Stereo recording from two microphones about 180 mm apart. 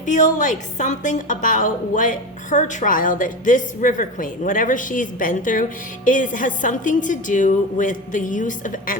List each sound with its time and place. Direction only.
0.0 s a woman's voice: 45° left (ahead or behind)